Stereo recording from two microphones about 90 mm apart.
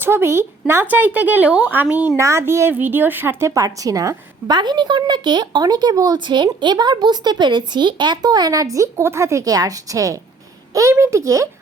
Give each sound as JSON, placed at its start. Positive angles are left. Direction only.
{"t": 0.0, "sound": "speech", "side_deg": -30}
{"t": 2.1, "sound": "speech", "side_deg": -30}
{"t": 3.5, "sound": "a woman's voice", "side_deg": -40}
{"t": 4.5, "sound": "a woman's voice", "side_deg": -55}